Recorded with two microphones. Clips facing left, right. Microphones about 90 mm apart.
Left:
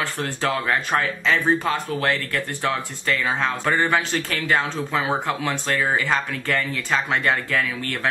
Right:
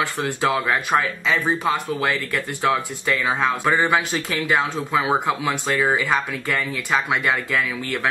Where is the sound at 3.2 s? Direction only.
15° right (ahead or behind).